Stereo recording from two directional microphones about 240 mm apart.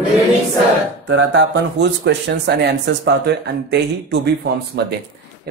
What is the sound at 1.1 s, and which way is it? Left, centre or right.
Speech, right.